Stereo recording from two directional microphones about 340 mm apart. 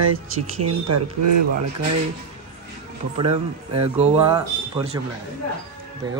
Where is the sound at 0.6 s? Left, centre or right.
Right.